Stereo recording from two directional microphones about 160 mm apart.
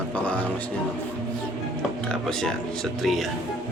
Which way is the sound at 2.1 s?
5° left (ahead or behind).